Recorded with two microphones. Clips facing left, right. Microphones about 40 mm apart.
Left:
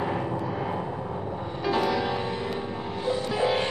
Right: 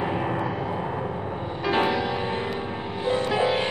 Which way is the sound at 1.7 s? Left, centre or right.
Right.